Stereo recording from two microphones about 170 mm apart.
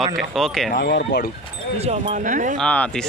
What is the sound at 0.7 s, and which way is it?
Speech, 80° left.